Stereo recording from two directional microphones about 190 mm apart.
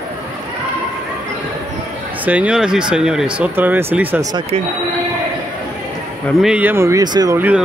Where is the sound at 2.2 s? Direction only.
5° right (ahead or behind).